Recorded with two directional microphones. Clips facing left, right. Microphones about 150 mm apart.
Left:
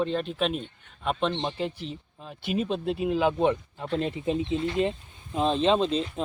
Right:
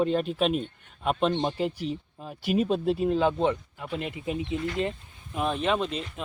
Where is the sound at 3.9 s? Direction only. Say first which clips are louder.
Left 4 dB; 30° left (ahead or behind).